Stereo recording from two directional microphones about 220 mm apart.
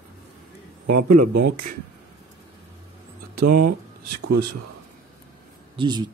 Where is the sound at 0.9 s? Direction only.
45° right (ahead or behind).